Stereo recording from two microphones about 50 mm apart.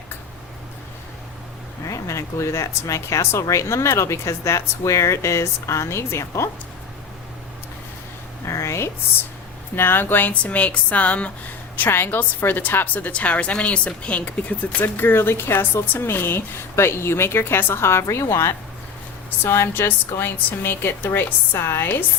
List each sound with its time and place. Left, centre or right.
1.9 s speech: left
8.4 s a sound: left
9.7 s a woman's voice: left
11.8 s a woman's voice: left
19.5 s a woman's voice: left
21.5 s a woman's voice: left